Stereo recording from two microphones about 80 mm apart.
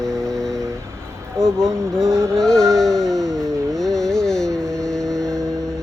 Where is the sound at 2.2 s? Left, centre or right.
Centre.